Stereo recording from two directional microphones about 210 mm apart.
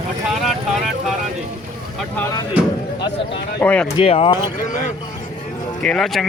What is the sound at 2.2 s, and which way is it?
Speech, 15° left (ahead or behind).